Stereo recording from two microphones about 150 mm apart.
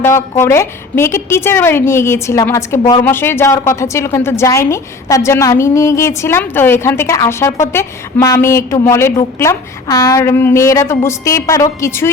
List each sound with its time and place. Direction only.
0.0 s a woman's voice: 15° left (ahead or behind)